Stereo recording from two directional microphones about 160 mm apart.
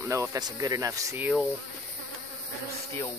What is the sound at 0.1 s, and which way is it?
Speech, 20° right (ahead or behind).